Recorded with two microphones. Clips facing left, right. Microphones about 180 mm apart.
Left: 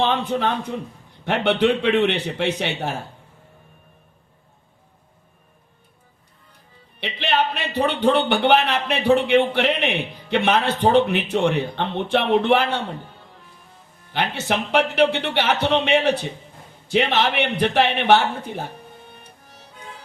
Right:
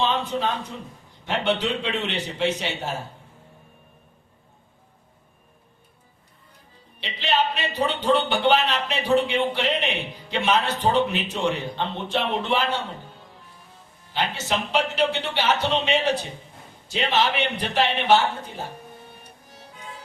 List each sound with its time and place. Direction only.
0.0 s a man's voice: 60° left (ahead or behind)
7.0 s a man's voice: 60° left (ahead or behind)
14.1 s a man's voice: 60° left (ahead or behind)